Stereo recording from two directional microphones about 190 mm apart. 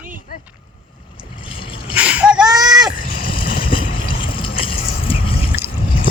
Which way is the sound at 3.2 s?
25° left (ahead or behind).